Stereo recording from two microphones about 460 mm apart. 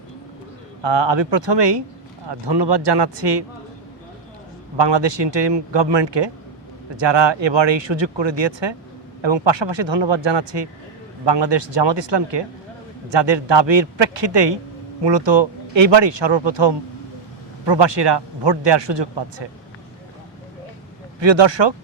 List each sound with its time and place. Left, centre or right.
0.8 s speech: right
4.8 s speech: right
21.2 s speech: right